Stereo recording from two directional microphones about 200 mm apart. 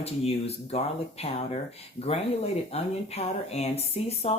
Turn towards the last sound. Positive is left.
turn(degrees=30)  # may be behind; listen again after turning